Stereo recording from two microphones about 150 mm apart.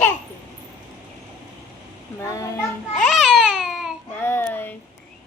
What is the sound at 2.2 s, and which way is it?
Speech, 20° left (ahead or behind).